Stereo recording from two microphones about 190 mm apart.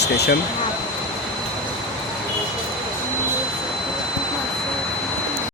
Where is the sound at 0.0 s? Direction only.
60° left (ahead or behind).